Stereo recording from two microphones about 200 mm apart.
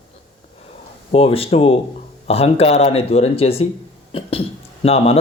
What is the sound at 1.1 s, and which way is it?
Speech, 30° left (ahead or behind).